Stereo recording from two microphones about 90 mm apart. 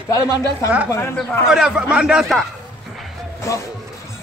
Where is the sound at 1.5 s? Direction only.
10° right (ahead or behind).